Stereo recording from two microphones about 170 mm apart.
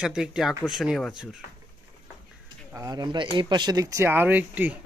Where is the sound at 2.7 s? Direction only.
20° right (ahead or behind).